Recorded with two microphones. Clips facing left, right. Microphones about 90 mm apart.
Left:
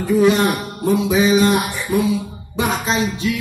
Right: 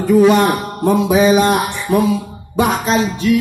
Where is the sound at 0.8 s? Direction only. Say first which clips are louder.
Right 4 dB; 55° right (ahead or behind).